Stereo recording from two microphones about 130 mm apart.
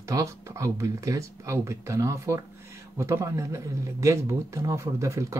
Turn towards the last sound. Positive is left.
turn(degrees=-25)  # may be behind; listen again after turning